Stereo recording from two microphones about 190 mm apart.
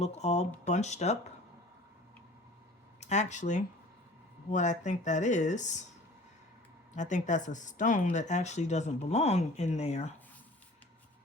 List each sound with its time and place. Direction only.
0.0 s speech: 35° left (ahead or behind)
3.0 s speech: 35° left (ahead or behind)
6.9 s speech: 40° left (ahead or behind)